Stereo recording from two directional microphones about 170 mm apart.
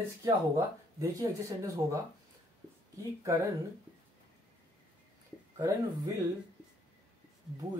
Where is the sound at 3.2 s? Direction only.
20° right (ahead or behind).